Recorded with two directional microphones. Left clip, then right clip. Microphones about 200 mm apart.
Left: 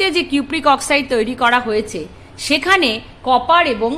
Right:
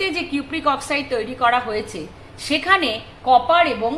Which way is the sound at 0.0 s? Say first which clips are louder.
Left 6 dB; 50° left (ahead or behind).